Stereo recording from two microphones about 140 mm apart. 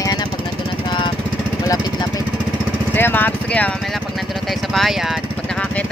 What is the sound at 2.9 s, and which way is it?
Speech, 15° left (ahead or behind).